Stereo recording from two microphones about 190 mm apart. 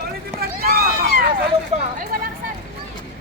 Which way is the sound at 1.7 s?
35° right (ahead or behind).